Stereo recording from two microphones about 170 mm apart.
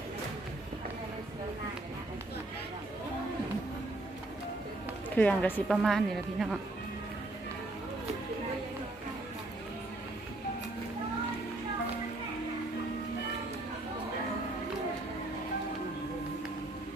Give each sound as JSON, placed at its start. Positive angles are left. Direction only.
{"t": 5.1, "sound": "a woman's voice", "side_deg": 10}